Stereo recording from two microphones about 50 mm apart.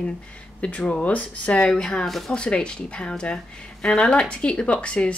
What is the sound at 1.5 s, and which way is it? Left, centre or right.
Speech, centre.